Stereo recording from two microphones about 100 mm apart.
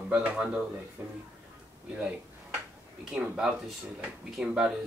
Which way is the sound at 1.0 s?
20° right (ahead or behind).